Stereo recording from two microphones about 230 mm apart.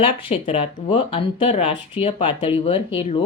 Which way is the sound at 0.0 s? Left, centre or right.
Left.